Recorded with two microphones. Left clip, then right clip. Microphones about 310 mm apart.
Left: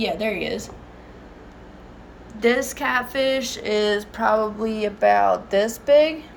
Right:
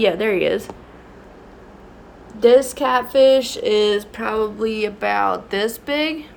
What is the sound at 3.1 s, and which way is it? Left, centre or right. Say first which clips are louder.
Speech: right 9 dB; centre.